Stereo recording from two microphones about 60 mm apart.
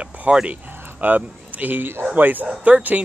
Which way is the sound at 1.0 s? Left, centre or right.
Right.